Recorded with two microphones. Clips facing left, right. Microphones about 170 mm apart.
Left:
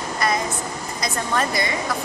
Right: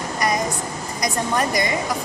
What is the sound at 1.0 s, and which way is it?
Speech, 15° right (ahead or behind).